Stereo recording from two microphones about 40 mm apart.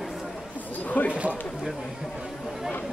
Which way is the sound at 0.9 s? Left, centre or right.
Left.